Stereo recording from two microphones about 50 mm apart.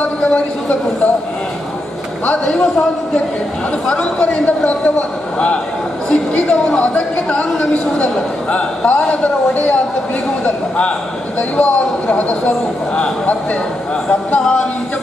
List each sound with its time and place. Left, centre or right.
0.2 s a man's voice: left
2.2 s a man's voice: centre
3.9 s a man's voice: centre
10.4 s a man's voice: left
14.0 s a sound: centre